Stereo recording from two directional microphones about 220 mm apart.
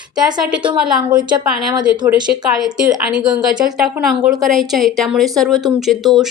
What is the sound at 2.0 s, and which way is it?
Speech, 20° right (ahead or behind).